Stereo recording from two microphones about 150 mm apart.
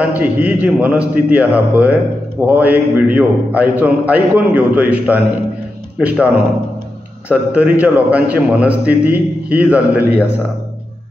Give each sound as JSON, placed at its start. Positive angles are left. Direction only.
{"t": 0.0, "sound": "a man's voice", "side_deg": -10}